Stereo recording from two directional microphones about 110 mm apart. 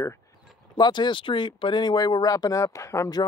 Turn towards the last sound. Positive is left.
turn(degrees=35)  # may be behind; listen again after turning